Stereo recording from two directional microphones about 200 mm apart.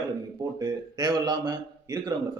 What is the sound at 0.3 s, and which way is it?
A man's voice, 20° right (ahead or behind).